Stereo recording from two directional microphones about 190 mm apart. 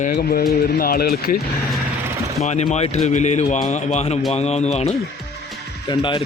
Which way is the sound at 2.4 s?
35° left (ahead or behind).